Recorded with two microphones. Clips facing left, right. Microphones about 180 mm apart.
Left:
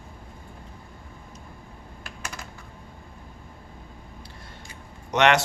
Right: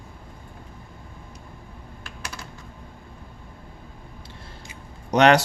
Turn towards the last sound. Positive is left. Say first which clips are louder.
# right 4 dB
turn(degrees=-35)  # may be behind; listen again after turning